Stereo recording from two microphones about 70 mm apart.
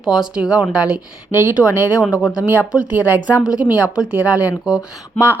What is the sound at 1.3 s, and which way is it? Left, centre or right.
A woman's voice, right.